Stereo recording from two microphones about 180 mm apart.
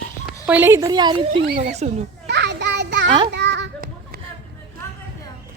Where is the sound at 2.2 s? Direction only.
75° right (ahead or behind).